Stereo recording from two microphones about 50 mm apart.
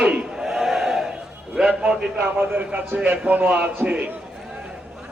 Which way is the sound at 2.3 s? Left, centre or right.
Right.